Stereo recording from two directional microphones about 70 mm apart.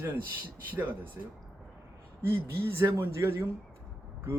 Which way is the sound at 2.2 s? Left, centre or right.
Right.